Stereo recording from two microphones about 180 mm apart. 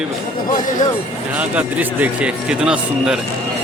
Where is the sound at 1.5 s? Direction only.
10° right (ahead or behind).